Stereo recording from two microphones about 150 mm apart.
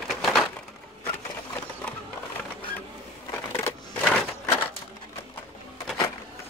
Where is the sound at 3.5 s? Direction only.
15° left (ahead or behind).